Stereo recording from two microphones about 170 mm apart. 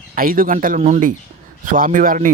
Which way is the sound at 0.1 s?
55° right (ahead or behind).